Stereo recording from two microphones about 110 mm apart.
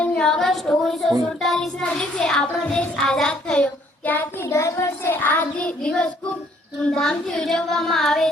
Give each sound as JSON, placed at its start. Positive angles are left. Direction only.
{"t": 0.0, "sound": "a sound", "side_deg": 10}
{"t": 1.4, "sound": "child singing", "side_deg": 5}
{"t": 4.5, "sound": "child singing", "side_deg": 25}